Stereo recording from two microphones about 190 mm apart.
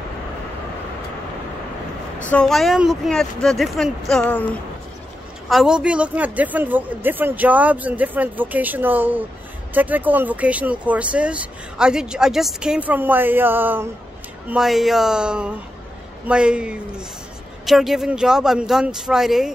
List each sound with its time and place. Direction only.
2.3 s speech: centre (ahead or behind)
5.5 s speech: 5° right (ahead or behind)